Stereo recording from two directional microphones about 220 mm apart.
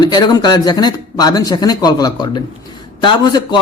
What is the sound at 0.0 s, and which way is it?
A man's voice, 20° left (ahead or behind).